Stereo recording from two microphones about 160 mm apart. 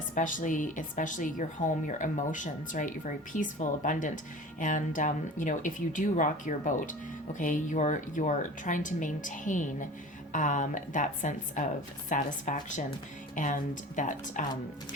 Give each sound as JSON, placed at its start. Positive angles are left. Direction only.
{"t": 0.1, "sound": "a woman's voice", "side_deg": 55}